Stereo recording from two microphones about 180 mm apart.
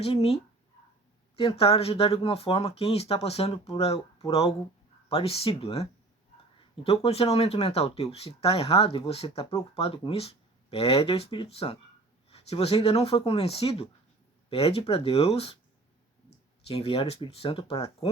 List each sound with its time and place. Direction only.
0.0 s speech: 35° left (ahead or behind)
1.4 s speech: 30° left (ahead or behind)
16.6 s speech: 30° left (ahead or behind)